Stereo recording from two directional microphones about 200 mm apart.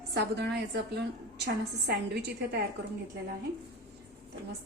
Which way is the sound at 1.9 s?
55° right (ahead or behind).